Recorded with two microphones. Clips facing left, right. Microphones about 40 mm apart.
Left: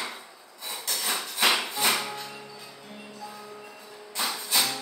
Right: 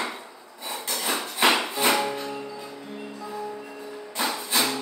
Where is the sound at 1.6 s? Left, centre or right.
Centre.